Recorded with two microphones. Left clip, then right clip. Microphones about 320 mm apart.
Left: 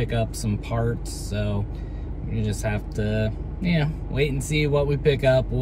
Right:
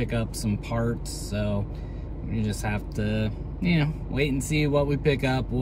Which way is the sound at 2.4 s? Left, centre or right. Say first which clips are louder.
Left 3 dB; centre.